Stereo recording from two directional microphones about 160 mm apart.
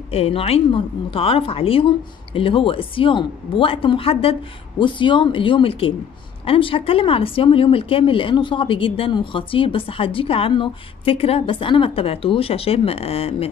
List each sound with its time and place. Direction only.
0.1 s speech: 35° left (ahead or behind)